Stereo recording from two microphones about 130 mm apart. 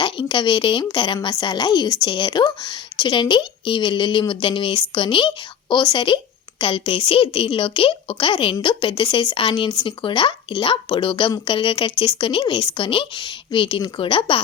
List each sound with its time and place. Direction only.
0.0 s a woman's voice: 40° left (ahead or behind)